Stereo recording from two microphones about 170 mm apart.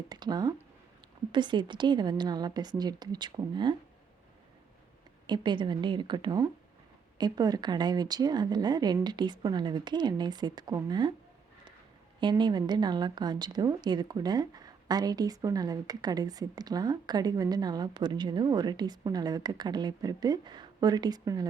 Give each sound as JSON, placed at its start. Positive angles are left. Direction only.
{"t": 0.1, "sound": "speech", "side_deg": -25}
{"t": 5.2, "sound": "speech", "side_deg": -25}
{"t": 12.2, "sound": "speech", "side_deg": -25}